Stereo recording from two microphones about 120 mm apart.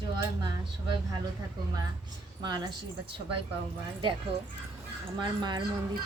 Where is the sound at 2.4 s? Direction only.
35° right (ahead or behind).